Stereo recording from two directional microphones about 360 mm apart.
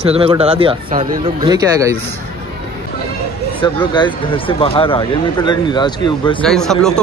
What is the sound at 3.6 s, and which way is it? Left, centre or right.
Speech, centre.